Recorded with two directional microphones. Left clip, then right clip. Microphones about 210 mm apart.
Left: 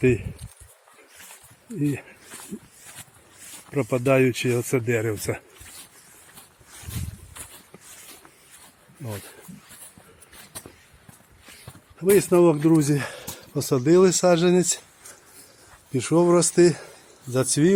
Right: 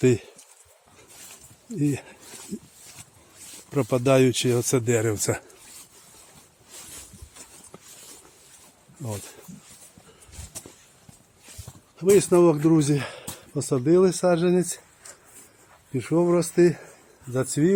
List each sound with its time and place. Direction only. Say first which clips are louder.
0.0 s speech: even; 15° right (ahead or behind)
1.8 s speech: right 1 dB; 20° right (ahead or behind)
3.7 s speech: even; 15° right (ahead or behind)
11.9 s speech: even; 5° right (ahead or behind)
15.9 s a man's voice: left 3 dB; 10° left (ahead or behind)